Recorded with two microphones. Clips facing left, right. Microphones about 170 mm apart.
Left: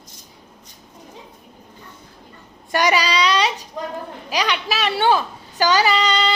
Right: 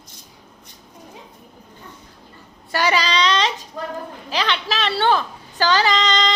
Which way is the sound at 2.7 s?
15° left (ahead or behind).